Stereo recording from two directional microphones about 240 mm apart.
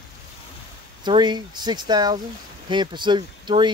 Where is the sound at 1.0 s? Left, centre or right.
Centre.